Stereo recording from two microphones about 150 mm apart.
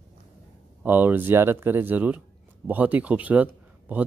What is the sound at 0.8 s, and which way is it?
Speech, 15° right (ahead or behind).